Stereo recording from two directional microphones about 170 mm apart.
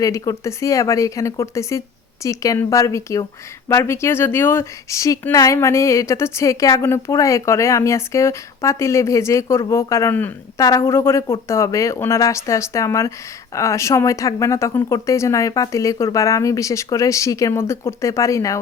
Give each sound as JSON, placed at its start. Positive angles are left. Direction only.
{"t": 0.0, "sound": "speech", "side_deg": 20}